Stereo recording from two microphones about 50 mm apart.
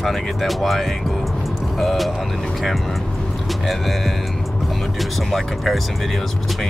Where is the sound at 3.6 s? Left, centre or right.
Centre.